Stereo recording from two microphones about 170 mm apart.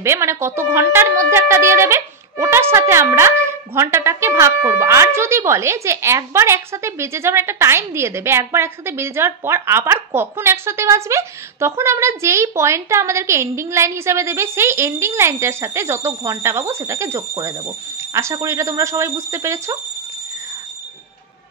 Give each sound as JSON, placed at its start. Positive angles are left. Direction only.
{"t": 0.0, "sound": "speech", "side_deg": -15}